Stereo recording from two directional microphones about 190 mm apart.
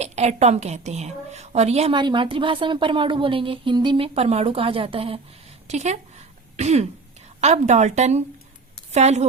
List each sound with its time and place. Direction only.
0.0 s a woman's voice: 35° right (ahead or behind)
5.6 s throat clearing: 35° right (ahead or behind)
7.4 s speech: 40° right (ahead or behind)